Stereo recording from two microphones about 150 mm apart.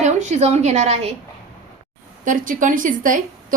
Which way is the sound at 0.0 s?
50° right (ahead or behind).